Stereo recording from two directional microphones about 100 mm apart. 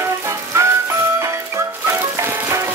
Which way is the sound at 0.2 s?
30° right (ahead or behind).